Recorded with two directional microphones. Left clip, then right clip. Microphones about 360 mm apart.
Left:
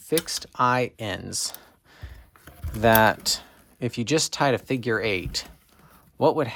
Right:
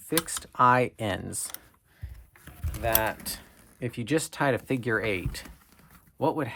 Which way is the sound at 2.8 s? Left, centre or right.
Centre.